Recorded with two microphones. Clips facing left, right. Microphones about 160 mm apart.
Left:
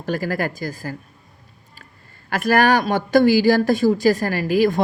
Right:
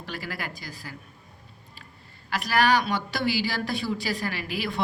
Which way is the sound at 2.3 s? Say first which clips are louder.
Left 6 dB; 50° left (ahead or behind).